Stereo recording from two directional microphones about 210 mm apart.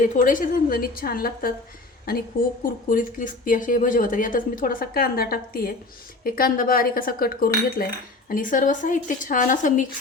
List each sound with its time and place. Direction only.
0.0 s speech: 40° left (ahead or behind)